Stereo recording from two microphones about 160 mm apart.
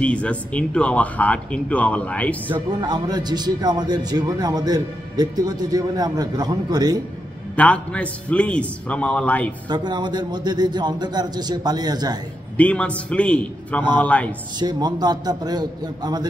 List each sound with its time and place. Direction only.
0.0 s speech: 10° left (ahead or behind)
2.5 s a man's voice: 25° right (ahead or behind)
7.5 s speech: 10° left (ahead or behind)
9.7 s a man's voice: 25° right (ahead or behind)
12.5 s speech: 10° left (ahead or behind)
14.6 s a man's voice: 25° right (ahead or behind)